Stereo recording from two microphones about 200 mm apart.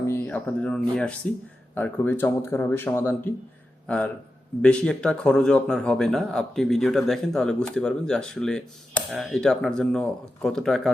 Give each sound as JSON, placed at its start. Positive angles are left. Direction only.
{"t": 0.0, "sound": "a man's voice", "side_deg": 10}